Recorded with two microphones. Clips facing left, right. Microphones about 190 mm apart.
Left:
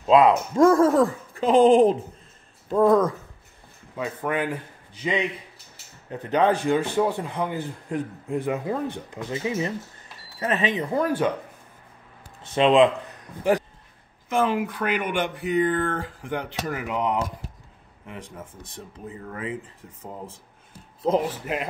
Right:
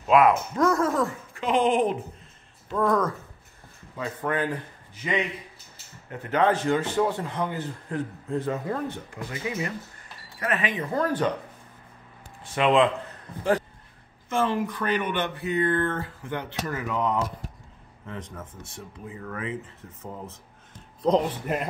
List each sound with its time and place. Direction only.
0.0 s speech: 25° left (ahead or behind)
3.9 s a man's voice: 15° left (ahead or behind)
6.1 s a man's voice: 15° left (ahead or behind)
12.5 s a man's voice: 20° left (ahead or behind)
18.2 s speech: 30° left (ahead or behind)
19.8 s speech: 10° left (ahead or behind)